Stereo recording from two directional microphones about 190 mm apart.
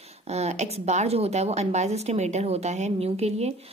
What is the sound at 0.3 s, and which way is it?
Speech, 35° right (ahead or behind).